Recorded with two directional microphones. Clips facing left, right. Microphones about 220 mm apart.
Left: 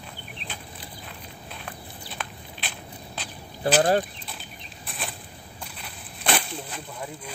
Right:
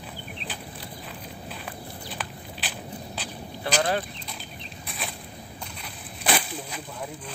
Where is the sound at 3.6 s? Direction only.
40° left (ahead or behind).